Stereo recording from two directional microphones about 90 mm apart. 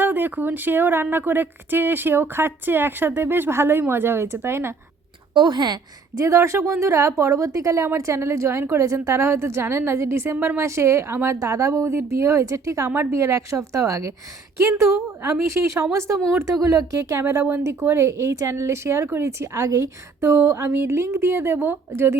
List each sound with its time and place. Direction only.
0.0 s speech: 20° right (ahead or behind)
5.3 s a woman's voice: 60° right (ahead or behind)
6.1 s a woman's voice: 35° right (ahead or behind)
15.2 s a woman's voice: 30° right (ahead or behind)